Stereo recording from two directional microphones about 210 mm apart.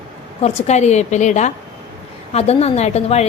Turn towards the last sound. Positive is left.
turn(degrees=30)  # may be behind; listen again after turning